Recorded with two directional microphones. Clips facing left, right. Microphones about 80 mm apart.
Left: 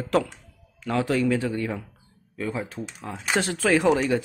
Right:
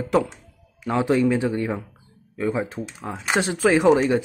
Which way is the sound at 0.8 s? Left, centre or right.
Right.